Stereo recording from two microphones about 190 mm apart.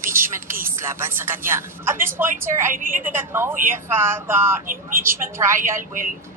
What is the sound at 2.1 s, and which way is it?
Speech, 10° right (ahead or behind).